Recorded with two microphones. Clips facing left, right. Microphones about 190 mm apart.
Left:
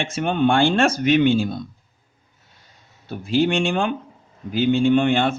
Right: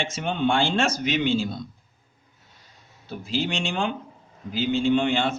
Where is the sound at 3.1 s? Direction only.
55° left (ahead or behind).